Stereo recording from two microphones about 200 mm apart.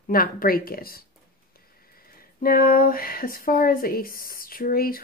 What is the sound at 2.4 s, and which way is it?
Speech, 45° left (ahead or behind).